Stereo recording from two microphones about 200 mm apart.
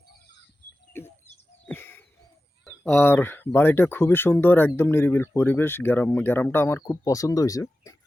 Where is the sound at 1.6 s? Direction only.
10° left (ahead or behind).